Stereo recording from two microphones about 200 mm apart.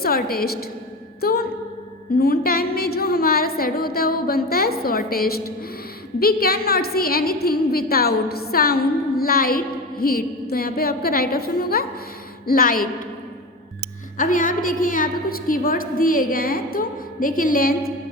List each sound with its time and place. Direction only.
0.0 s a woman's voice: 50° left (ahead or behind)
14.2 s a woman's voice: 40° left (ahead or behind)